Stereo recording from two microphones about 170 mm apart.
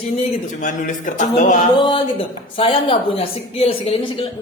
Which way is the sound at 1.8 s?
30° left (ahead or behind).